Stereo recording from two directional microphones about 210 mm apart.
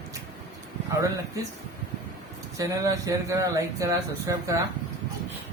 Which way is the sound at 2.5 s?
15° right (ahead or behind).